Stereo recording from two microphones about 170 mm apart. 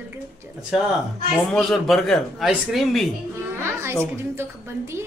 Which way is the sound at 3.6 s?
15° right (ahead or behind).